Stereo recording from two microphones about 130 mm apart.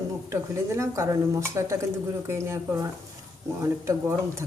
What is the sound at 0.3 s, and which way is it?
A woman's voice, 20° right (ahead or behind).